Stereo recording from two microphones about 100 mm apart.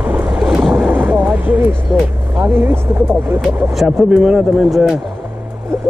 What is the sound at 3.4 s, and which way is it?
Speech, 5° right (ahead or behind).